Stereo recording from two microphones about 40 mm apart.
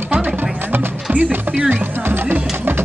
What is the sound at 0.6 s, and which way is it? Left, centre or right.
Music, right.